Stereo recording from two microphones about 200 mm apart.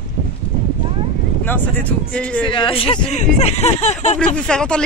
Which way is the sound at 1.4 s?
10° left (ahead or behind).